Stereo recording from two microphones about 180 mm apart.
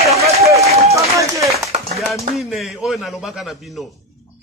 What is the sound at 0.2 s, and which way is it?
Run, 15° right (ahead or behind).